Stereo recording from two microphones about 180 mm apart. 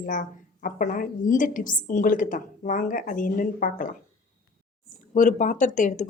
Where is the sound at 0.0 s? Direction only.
45° left (ahead or behind).